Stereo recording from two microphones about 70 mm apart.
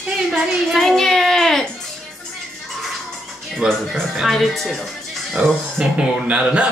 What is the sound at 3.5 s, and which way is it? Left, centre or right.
Speech, centre.